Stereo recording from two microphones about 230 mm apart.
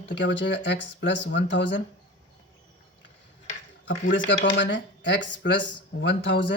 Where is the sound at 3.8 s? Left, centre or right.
Left.